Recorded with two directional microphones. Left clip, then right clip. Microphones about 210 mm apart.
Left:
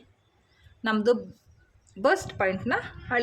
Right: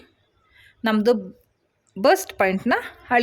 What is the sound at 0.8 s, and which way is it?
Speech, 35° right (ahead or behind).